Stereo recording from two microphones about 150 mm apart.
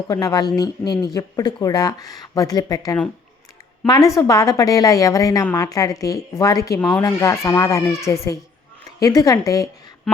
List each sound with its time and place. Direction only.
0.1 s speech: 25° left (ahead or behind)